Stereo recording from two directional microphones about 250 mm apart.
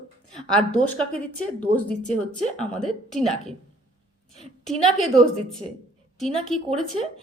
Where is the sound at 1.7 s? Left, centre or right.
Right.